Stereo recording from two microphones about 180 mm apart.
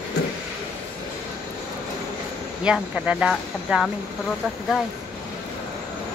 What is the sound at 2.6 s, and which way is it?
Speech, 5° right (ahead or behind).